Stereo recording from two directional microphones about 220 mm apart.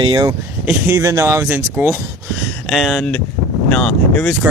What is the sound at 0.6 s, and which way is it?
Speech, 10° right (ahead or behind).